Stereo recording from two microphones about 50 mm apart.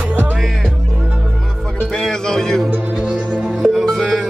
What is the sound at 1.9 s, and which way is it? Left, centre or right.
Speech, centre.